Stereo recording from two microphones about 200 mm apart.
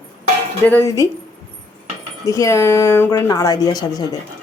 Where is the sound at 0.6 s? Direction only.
10° left (ahead or behind).